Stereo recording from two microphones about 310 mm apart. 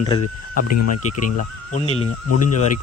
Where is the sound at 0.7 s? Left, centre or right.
Left.